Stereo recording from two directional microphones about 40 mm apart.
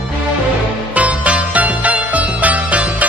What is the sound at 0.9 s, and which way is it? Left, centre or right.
Music, right.